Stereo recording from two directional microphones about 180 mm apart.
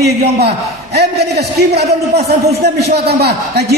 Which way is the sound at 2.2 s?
65° right (ahead or behind).